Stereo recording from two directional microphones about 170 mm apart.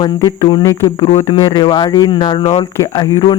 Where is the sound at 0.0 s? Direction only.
25° left (ahead or behind).